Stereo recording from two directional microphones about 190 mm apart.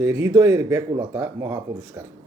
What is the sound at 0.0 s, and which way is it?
Speech, 20° right (ahead or behind).